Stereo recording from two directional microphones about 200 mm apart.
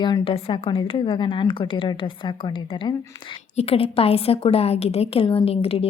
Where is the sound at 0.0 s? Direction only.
25° left (ahead or behind).